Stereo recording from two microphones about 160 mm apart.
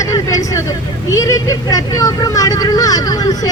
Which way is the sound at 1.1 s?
20° left (ahead or behind).